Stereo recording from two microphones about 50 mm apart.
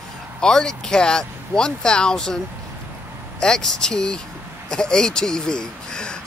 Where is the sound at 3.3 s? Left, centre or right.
Centre.